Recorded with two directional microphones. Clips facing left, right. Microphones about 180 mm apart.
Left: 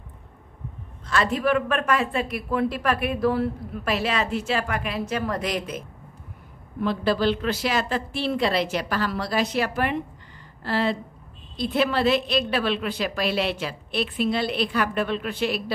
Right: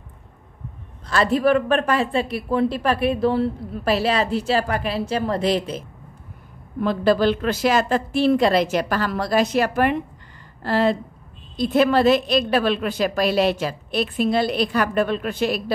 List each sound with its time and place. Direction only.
1.0 s speech: 35° right (ahead or behind)
6.8 s a woman's voice: 45° right (ahead or behind)